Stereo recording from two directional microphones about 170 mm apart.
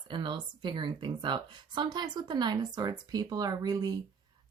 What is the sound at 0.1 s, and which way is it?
Speech, 30° right (ahead or behind).